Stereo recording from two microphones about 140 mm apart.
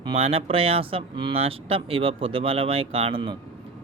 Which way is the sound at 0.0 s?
40° right (ahead or behind).